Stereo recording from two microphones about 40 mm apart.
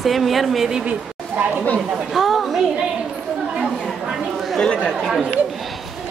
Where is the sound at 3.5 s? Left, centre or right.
Right.